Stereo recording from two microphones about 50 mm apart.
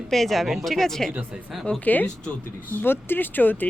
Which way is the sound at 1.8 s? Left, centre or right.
Left.